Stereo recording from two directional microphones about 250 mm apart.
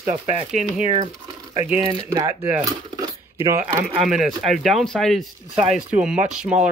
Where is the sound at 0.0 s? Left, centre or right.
Right.